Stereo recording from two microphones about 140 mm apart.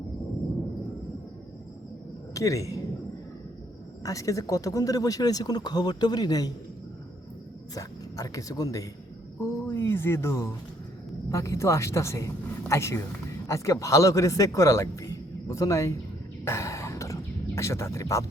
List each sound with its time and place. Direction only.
2.3 s speech: 25° left (ahead or behind)
4.0 s speech: 25° left (ahead or behind)
7.7 s speech: 25° left (ahead or behind)
16.4 s a sound: 20° left (ahead or behind)